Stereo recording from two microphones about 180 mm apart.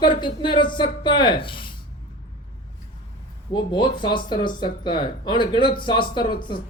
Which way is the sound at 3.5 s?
25° left (ahead or behind).